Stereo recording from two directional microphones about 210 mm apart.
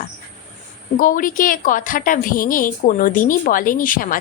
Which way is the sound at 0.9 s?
40° left (ahead or behind).